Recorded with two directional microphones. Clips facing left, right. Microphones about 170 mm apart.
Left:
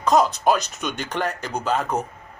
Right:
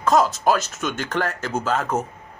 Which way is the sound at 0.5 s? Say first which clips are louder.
Even; 15° left (ahead or behind).